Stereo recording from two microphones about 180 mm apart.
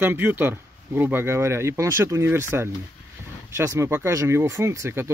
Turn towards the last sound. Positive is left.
turn(degrees=-15)  # may be behind; listen again after turning